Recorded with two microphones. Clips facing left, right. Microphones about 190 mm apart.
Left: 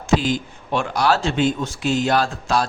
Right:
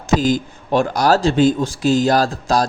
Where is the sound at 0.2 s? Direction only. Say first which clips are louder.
Right 5 dB; 40° right (ahead or behind).